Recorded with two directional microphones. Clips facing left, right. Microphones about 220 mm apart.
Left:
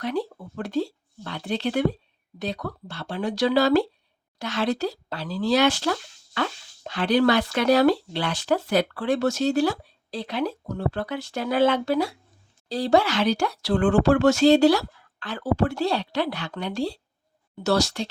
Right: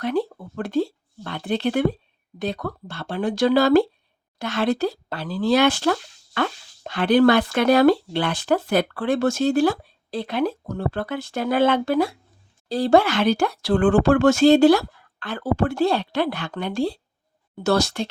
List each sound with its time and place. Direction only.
0.0 s speech: 55° right (ahead or behind)